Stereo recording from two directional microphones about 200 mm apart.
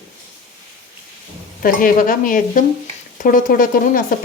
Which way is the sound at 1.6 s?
45° left (ahead or behind).